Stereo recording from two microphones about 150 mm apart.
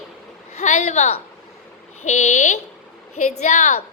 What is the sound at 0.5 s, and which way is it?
A woman's voice, 50° left (ahead or behind).